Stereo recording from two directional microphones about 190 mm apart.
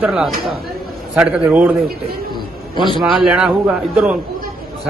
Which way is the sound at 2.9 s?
Centre (ahead or behind).